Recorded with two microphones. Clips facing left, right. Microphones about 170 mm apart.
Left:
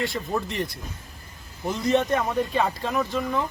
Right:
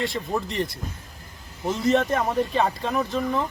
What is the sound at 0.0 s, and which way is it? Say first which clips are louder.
Speech: right 1 dB; centre (ahead or behind).